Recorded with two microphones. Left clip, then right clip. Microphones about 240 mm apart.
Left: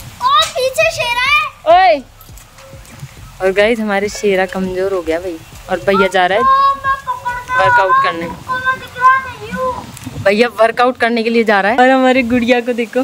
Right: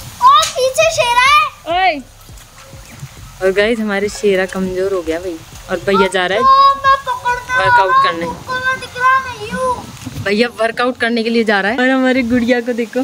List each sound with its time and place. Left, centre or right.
0.2 s children playing: centre
1.7 s a sound: left
3.3 s speech: centre
6.4 s child singing: right
7.5 s speech: centre
8.5 s a sound: right
10.2 s speech: centre